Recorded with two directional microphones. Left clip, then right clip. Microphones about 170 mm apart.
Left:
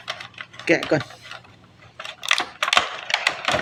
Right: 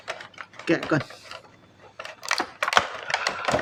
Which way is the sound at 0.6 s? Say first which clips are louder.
Left 5 dB; 25° right (ahead or behind).